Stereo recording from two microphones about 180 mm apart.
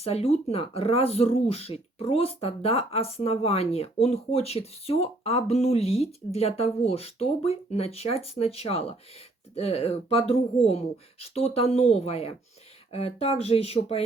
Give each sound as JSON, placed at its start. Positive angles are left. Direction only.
{"t": 0.0, "sound": "speech", "side_deg": 35}